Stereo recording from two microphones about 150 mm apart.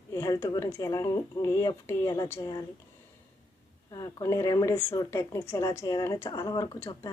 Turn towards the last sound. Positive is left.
turn(degrees=25)  # may be behind; listen again after turning